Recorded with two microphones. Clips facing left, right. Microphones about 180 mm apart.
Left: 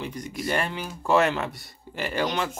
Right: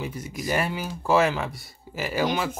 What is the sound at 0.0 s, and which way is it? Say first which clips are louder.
Speech: even; 5° right (ahead or behind).